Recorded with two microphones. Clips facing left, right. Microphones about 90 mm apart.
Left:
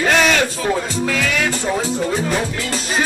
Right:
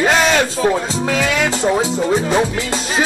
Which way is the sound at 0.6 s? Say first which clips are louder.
Right 3 dB; 20° right (ahead or behind).